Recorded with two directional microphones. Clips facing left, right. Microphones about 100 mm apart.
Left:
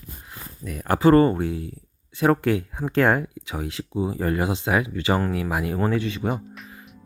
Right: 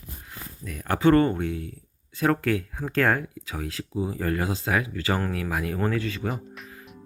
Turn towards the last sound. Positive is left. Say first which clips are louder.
# left 3 dB
turn(degrees=0)  # may be behind; listen again after turning